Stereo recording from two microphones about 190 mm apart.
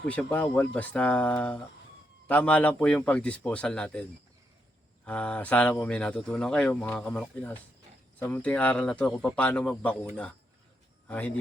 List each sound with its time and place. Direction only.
0.0 s speech: 5° left (ahead or behind)
5.0 s speech: 5° left (ahead or behind)